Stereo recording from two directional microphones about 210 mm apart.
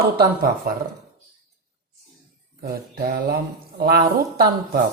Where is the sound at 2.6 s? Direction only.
45° right (ahead or behind).